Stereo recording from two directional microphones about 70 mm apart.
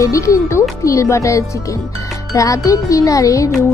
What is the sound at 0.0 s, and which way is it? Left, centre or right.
Speech, left.